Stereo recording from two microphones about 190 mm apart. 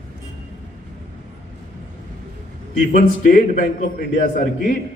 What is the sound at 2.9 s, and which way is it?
Speech, 45° left (ahead or behind).